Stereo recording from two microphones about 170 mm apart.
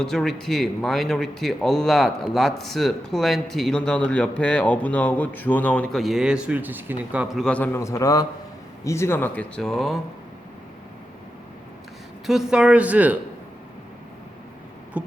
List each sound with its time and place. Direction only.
0.0 s speech: 5° left (ahead or behind)
12.2 s speech: centre (ahead or behind)
15.0 s guitar: 10° right (ahead or behind)